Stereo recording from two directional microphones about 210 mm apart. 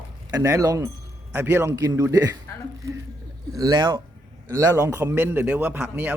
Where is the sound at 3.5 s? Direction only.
15° right (ahead or behind).